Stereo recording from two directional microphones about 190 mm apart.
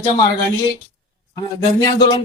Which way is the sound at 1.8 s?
20° left (ahead or behind).